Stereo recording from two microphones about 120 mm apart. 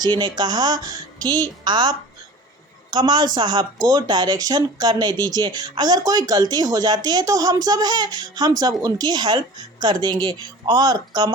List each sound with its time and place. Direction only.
0.0 s a woman's voice: 35° right (ahead or behind)